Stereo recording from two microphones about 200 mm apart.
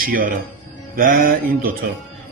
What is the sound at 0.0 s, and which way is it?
Speech, 45° right (ahead or behind).